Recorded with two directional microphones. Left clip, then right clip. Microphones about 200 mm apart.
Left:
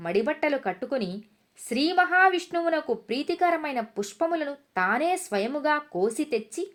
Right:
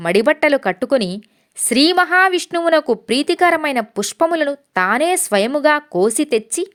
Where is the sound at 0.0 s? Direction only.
40° right (ahead or behind).